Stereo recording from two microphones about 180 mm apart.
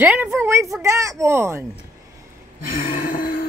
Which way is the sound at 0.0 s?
10° right (ahead or behind).